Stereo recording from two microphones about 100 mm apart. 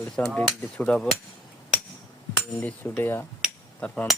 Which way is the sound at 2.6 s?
20° left (ahead or behind).